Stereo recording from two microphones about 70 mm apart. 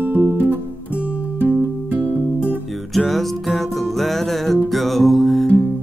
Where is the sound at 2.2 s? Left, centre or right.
Left.